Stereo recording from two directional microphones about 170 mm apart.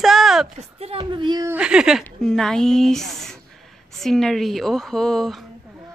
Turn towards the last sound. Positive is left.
turn(degrees=0)  # may be behind; listen again after turning